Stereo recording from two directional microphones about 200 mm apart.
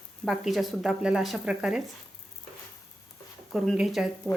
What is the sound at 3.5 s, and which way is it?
Speech, centre (ahead or behind).